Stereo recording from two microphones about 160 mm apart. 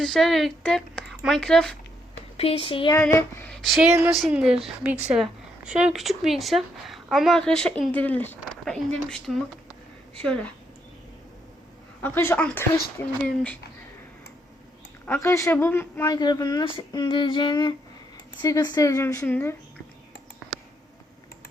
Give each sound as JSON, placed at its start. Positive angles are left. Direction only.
{"t": 0.0, "sound": "speech", "side_deg": 5}
{"t": 2.4, "sound": "speech", "side_deg": 35}
{"t": 3.0, "sound": "speech", "side_deg": 15}
{"t": 3.5, "sound": "speech", "side_deg": 0}
{"t": 12.0, "sound": "speech", "side_deg": 15}
{"t": 15.0, "sound": "a woman's voice", "side_deg": 15}